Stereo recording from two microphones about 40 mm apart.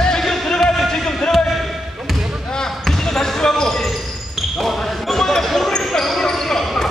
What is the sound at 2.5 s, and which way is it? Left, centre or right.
Basketball bounce, centre.